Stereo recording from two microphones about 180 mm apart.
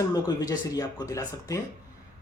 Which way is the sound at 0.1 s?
20° left (ahead or behind).